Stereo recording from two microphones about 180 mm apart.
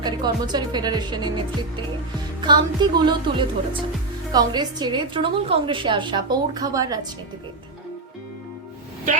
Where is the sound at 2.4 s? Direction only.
25° right (ahead or behind).